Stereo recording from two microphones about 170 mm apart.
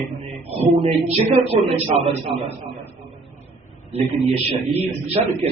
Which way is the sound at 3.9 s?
35° right (ahead or behind).